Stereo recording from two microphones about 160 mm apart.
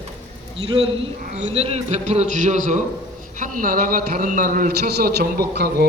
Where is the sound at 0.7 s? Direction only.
35° right (ahead or behind).